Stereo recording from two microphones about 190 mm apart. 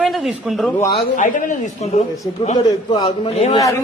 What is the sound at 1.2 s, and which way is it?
Speech, 40° left (ahead or behind).